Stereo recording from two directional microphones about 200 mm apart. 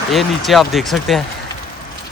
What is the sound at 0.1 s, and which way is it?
Speech, centre (ahead or behind).